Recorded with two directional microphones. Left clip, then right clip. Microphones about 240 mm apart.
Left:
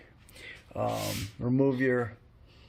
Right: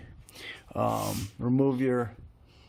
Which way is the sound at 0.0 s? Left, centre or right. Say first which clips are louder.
Right 4 dB; centre.